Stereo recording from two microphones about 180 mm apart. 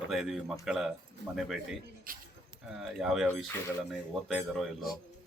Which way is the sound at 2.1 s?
50° right (ahead or behind).